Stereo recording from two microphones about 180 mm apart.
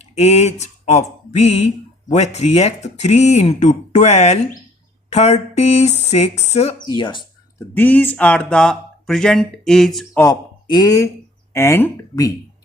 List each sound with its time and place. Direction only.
0.0 s speech: 35° left (ahead or behind)
6.7 s speech: 25° left (ahead or behind)
7.7 s speech: 10° left (ahead or behind)
10.2 s speech: 20° left (ahead or behind)